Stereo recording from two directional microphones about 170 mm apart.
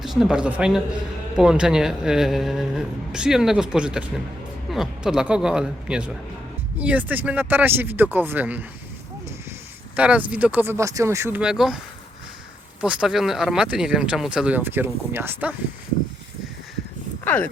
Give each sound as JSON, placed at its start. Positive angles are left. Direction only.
{"t": 0.0, "sound": "a man's voice", "side_deg": 0}
{"t": 9.9, "sound": "speech", "side_deg": -10}
{"t": 12.8, "sound": "speech", "side_deg": -5}
{"t": 17.2, "sound": "speech", "side_deg": 10}